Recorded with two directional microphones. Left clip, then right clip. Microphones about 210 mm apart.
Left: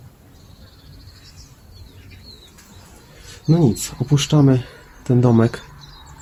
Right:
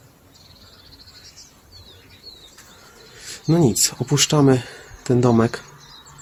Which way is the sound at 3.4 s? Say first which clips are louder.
Right 1 dB; 25° right (ahead or behind).